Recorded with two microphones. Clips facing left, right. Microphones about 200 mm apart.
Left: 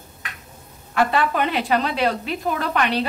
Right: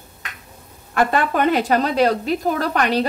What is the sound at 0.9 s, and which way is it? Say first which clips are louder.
A woman's voice: right 1 dB; 45° right (ahead or behind).